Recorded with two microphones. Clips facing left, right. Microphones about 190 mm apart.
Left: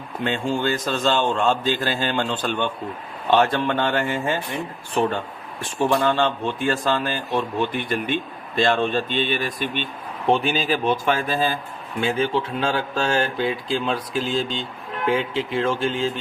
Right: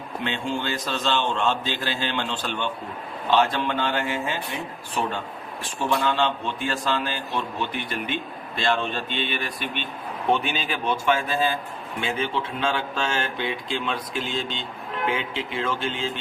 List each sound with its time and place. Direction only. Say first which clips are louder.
0.3 s a man's voice: left 6 dB; 45° left (ahead or behind)
5.6 s speech: left 5 dB; 50° left (ahead or behind)
10.2 s speech: left 4 dB; 35° left (ahead or behind)